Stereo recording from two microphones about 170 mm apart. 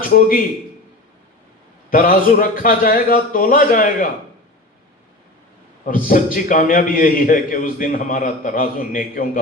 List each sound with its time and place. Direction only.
0.0 s a man's voice: 55° left (ahead or behind)
1.9 s a man's voice: 55° left (ahead or behind)
5.8 s a man's voice: 50° left (ahead or behind)